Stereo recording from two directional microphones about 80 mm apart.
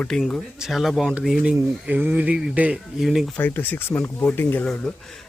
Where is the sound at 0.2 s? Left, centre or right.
Centre.